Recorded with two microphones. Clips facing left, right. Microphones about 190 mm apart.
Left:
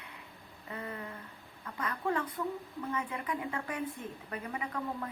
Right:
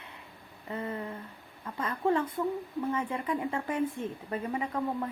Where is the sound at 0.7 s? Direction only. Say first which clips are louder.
Right 6 dB; 30° right (ahead or behind).